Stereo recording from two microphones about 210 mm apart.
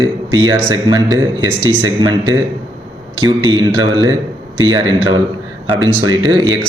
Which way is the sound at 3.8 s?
20° right (ahead or behind).